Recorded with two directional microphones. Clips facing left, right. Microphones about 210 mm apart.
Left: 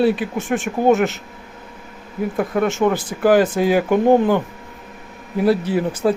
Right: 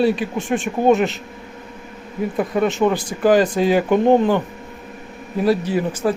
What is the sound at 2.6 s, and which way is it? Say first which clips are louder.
Speech: right 1 dB; 15° right (ahead or behind).